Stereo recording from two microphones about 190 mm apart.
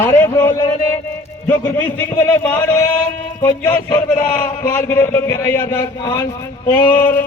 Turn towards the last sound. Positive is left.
turn(degrees=10)  # may be behind; listen again after turning